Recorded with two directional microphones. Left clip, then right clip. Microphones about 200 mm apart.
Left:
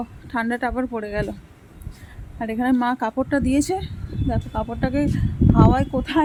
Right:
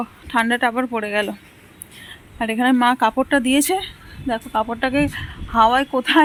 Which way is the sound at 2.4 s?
5° right (ahead or behind).